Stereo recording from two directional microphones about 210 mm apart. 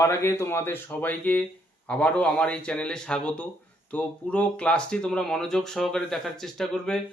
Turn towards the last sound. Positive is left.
turn(degrees=0)  # may be behind; listen again after turning